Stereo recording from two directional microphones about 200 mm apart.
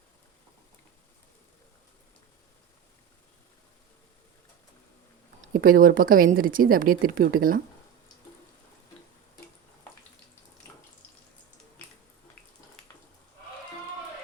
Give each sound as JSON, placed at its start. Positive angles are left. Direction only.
{"t": 5.5, "sound": "a woman's voice", "side_deg": -45}